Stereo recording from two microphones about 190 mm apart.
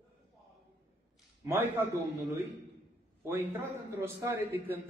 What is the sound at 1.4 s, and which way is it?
Speech, 10° right (ahead or behind).